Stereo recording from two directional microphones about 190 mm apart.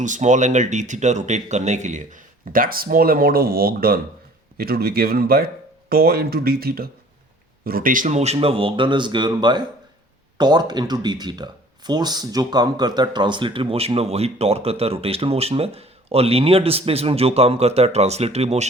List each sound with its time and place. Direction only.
0.0 s speech: 40° right (ahead or behind)